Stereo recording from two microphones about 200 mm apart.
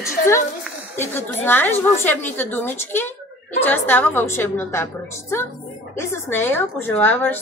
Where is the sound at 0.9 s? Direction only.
10° left (ahead or behind).